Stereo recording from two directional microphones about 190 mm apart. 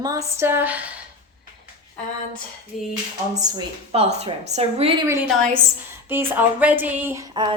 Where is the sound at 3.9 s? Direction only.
35° right (ahead or behind).